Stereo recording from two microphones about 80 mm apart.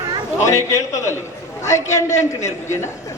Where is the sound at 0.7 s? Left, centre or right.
Left.